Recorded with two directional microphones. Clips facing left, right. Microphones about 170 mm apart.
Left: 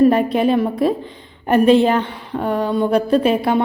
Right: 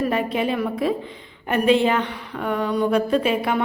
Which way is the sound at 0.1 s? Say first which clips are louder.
Left 7 dB; 40° left (ahead or behind).